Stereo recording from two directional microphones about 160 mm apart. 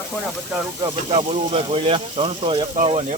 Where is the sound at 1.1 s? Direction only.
40° right (ahead or behind).